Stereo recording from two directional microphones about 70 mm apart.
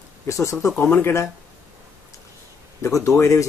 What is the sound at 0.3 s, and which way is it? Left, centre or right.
Speech, left.